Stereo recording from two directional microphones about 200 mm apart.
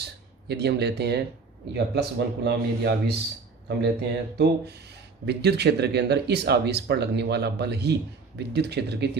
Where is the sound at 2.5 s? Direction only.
55° right (ahead or behind).